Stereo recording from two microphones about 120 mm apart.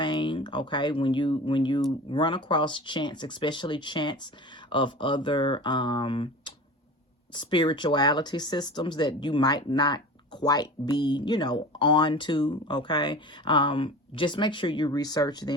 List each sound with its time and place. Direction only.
0.0 s speech: 40° left (ahead or behind)